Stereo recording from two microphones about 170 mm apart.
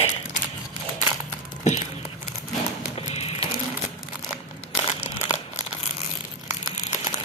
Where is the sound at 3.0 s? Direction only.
35° left (ahead or behind).